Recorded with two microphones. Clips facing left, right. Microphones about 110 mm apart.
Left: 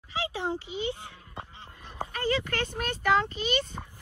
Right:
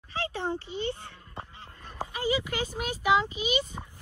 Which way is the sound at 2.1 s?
10° right (ahead or behind).